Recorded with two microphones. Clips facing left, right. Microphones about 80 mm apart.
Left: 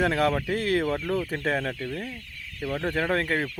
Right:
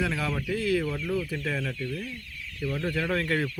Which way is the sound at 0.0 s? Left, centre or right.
Left.